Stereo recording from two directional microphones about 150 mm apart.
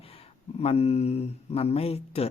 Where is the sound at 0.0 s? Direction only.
40° left (ahead or behind).